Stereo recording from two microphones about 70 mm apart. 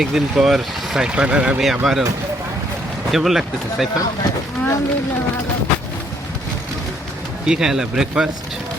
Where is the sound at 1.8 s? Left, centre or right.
Centre.